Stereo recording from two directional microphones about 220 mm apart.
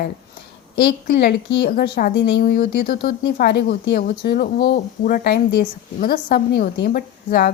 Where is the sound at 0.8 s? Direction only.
45° left (ahead or behind).